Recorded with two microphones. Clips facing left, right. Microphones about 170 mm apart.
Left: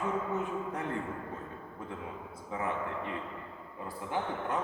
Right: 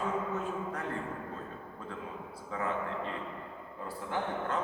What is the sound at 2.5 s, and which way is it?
A man's voice, 20° left (ahead or behind).